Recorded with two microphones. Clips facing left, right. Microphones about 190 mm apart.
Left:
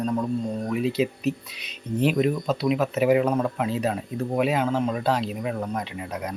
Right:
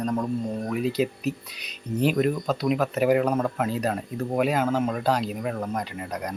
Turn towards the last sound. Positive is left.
turn(degrees=0)  # may be behind; listen again after turning